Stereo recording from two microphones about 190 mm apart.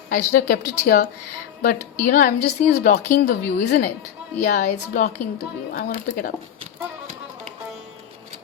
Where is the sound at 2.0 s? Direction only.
45° left (ahead or behind).